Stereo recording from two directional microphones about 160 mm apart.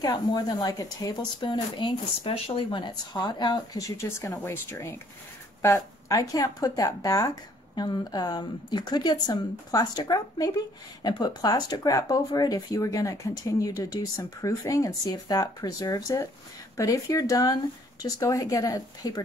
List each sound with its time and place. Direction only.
0.0 s speech: 25° left (ahead or behind)